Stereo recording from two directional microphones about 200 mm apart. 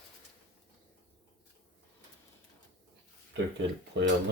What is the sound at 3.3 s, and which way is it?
Speech, 65° right (ahead or behind).